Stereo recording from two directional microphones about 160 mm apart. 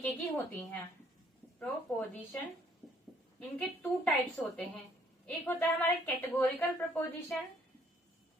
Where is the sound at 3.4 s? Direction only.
5° left (ahead or behind).